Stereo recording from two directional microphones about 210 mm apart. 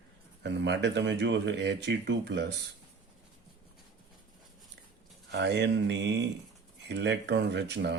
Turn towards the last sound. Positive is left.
turn(degrees=-55)  # may be behind; listen again after turning